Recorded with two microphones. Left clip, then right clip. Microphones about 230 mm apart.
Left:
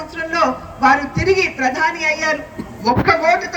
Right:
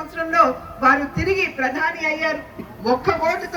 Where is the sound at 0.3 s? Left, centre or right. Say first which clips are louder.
Right 1 dB; left.